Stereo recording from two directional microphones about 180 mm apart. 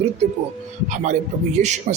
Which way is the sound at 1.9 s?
45° right (ahead or behind).